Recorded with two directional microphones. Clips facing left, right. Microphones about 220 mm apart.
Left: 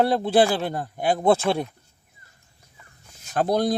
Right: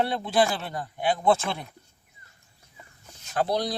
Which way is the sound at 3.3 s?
50° left (ahead or behind).